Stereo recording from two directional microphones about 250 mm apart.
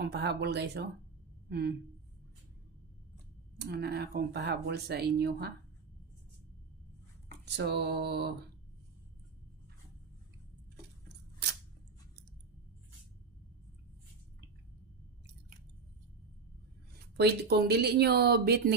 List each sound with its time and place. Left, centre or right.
0.0 s speech: right
3.7 s speech: right
7.4 s speech: right
11.1 s scissors: right
17.2 s speech: right